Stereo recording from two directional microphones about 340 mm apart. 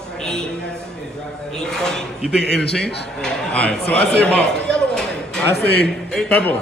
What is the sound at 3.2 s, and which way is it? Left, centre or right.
Speech, centre.